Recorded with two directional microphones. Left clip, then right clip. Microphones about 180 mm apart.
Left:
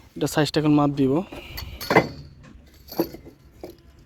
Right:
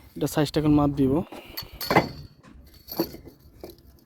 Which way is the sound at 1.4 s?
20° right (ahead or behind).